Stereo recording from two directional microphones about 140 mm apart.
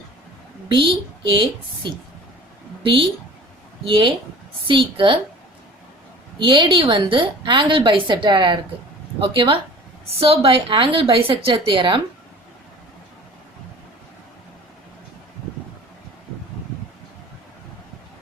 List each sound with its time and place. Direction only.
0.7 s a woman's voice: 35° right (ahead or behind)
6.4 s a woman's voice: 35° right (ahead or behind)